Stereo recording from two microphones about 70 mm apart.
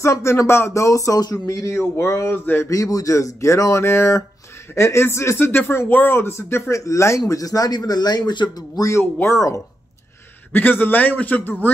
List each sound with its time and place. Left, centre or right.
0.0 s speech: left
1.8 s speech: left
2.4 s speech: left
2.7 s speech: left
8.8 s speech: left
10.5 s a man's voice: left